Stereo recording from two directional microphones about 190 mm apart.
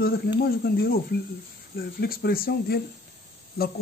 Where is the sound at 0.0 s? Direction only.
55° left (ahead or behind).